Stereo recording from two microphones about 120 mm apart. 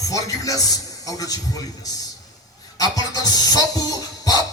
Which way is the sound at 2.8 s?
30° left (ahead or behind).